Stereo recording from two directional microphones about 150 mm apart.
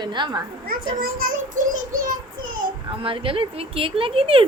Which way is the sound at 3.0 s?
35° right (ahead or behind).